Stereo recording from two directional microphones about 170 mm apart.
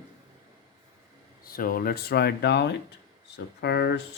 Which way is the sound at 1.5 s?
60° left (ahead or behind).